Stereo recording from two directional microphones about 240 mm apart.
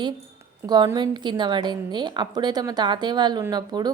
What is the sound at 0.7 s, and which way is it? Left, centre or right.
A woman's voice, centre.